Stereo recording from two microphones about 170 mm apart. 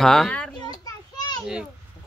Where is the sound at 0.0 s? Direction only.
5° left (ahead or behind).